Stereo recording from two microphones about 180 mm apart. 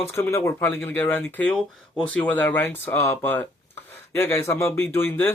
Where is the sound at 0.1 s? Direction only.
15° left (ahead or behind).